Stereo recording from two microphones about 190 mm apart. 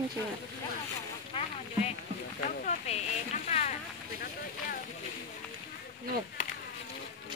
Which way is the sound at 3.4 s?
35° left (ahead or behind).